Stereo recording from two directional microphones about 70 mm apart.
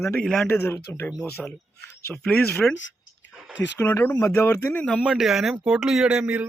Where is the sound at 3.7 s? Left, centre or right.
Left.